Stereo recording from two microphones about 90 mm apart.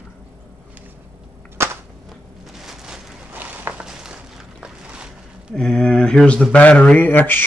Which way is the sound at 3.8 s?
10° right (ahead or behind).